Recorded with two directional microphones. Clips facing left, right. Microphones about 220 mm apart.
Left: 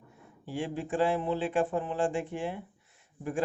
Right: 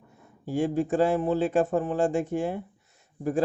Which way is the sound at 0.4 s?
45° right (ahead or behind).